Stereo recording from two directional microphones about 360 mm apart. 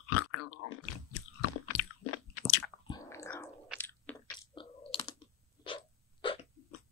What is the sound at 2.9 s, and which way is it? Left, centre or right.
Biting, centre.